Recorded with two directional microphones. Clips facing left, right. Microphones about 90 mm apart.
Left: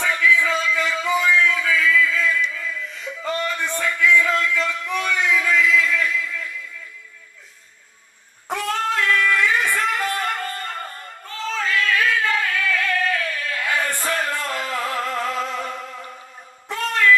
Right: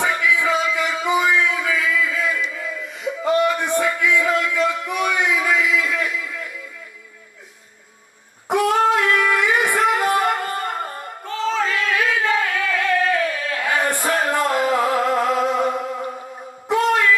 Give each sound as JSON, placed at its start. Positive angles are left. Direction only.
{"t": 0.0, "sound": "music", "side_deg": -20}
{"t": 4.0, "sound": "a sound", "side_deg": -15}
{"t": 8.4, "sound": "singing", "side_deg": -15}
{"t": 11.6, "sound": "a sound", "side_deg": -25}
{"t": 14.3, "sound": "music", "side_deg": -20}
{"t": 16.6, "sound": "shofar", "side_deg": -15}